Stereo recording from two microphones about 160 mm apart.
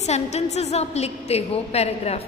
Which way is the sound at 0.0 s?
45° left (ahead or behind).